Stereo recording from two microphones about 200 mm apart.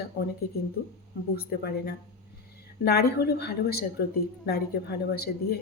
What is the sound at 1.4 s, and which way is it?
A woman's voice, 50° left (ahead or behind).